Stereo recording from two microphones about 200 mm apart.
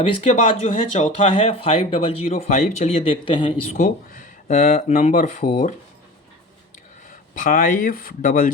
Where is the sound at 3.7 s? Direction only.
40° left (ahead or behind).